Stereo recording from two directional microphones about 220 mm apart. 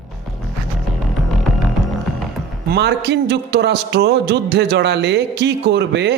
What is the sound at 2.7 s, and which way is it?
A man's voice, 50° right (ahead or behind).